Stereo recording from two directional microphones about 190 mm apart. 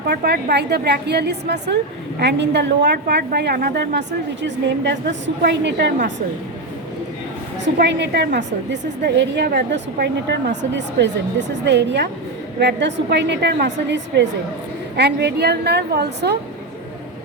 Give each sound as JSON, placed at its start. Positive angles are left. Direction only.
{"t": 0.1, "sound": "a woman's voice", "side_deg": -60}
{"t": 7.6, "sound": "a woman's voice", "side_deg": -65}